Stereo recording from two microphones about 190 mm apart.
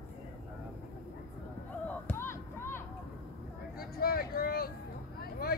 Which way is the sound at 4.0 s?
50° left (ahead or behind).